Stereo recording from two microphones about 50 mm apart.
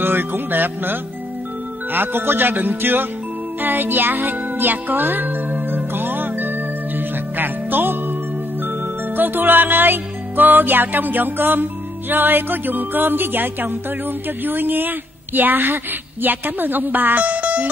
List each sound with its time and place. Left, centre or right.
0.0 s speech: right
3.6 s music: right